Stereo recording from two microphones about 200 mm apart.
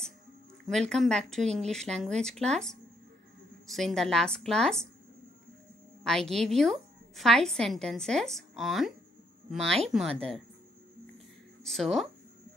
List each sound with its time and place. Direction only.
0.7 s a woman's voice: centre (ahead or behind)
1.4 s speech: 35° right (ahead or behind)
1.7 s a woman's voice: 5° left (ahead or behind)
6.0 s a woman's voice: centre (ahead or behind)
11.6 s a woman's voice: centre (ahead or behind)